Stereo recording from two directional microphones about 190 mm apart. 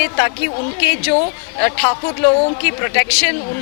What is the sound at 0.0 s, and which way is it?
Speech, 15° left (ahead or behind).